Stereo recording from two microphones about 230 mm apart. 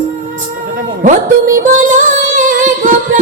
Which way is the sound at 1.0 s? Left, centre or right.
Right.